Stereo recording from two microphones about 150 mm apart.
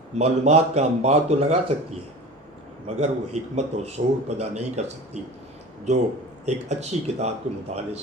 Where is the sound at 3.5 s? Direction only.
45° right (ahead or behind).